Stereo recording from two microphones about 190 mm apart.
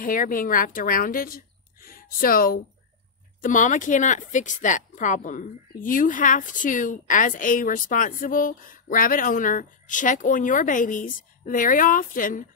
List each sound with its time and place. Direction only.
0.0 s speech: 45° left (ahead or behind)